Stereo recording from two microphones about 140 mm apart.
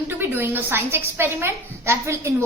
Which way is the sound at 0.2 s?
15° right (ahead or behind).